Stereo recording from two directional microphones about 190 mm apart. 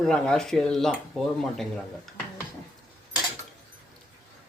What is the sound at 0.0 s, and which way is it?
Speech, 5° left (ahead or behind).